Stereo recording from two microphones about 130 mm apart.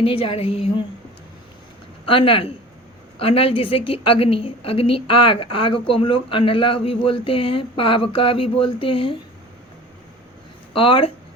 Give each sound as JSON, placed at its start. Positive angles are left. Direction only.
{"t": 0.0, "sound": "a woman's voice", "side_deg": 45}
{"t": 2.0, "sound": "a woman's voice", "side_deg": 45}
{"t": 10.8, "sound": "a woman's voice", "side_deg": 45}